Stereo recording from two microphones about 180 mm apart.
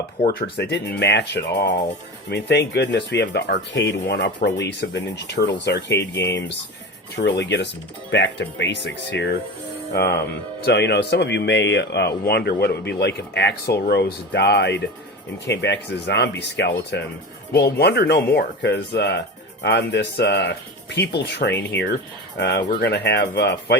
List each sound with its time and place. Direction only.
0.3 s speech: 60° left (ahead or behind); by 9.3 s 80° left
9.9 s speech: 65° left (ahead or behind)